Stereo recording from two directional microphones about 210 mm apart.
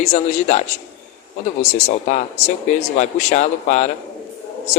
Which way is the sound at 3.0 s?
35° left (ahead or behind).